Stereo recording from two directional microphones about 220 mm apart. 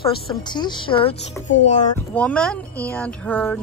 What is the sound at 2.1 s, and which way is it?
Speech, 5° left (ahead or behind).